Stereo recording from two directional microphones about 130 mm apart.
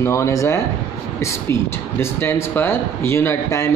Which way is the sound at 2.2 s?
15° left (ahead or behind).